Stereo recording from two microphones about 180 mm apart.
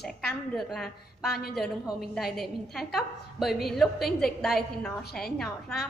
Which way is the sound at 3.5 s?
60° left (ahead or behind).